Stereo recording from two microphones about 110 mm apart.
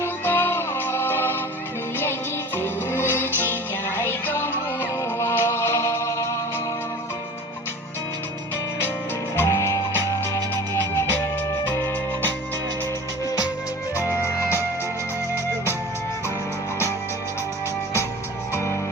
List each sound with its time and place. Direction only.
0.0 s music: 20° left (ahead or behind)
2.6 s music: 20° left (ahead or behind)
9.3 s music: 25° left (ahead or behind)
11.7 s music: 20° left (ahead or behind)
13.9 s music: 25° left (ahead or behind)